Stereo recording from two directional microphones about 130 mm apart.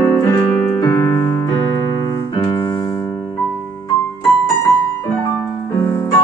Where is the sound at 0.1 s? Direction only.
25° left (ahead or behind).